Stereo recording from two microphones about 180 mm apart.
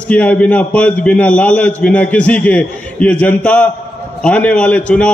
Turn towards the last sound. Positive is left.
turn(degrees=5)  # may be behind; listen again after turning